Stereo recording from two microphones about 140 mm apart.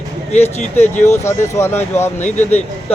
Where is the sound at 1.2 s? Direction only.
20° left (ahead or behind).